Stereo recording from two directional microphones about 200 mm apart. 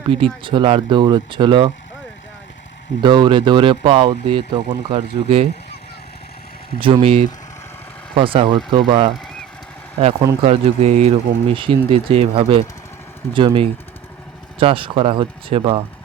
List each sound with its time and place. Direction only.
0.1 s speech: 25° right (ahead or behind)
3.0 s speech: 25° right (ahead or behind)
6.7 s speech: 25° right (ahead or behind)